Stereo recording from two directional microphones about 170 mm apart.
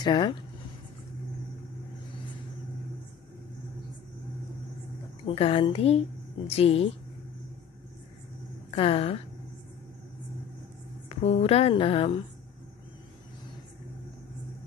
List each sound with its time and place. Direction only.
0.0 s speech: 25° left (ahead or behind)
5.2 s speech: 35° left (ahead or behind)
8.7 s speech: 35° left (ahead or behind)
11.1 s speech: 35° left (ahead or behind)